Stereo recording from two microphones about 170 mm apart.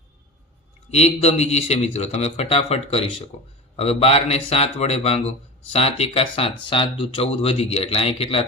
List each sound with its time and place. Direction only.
0.9 s a man's voice: 40° left (ahead or behind)